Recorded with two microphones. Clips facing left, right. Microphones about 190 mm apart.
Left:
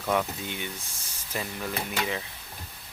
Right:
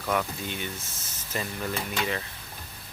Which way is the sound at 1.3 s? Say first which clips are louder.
Right 1 dB; 5° left (ahead or behind).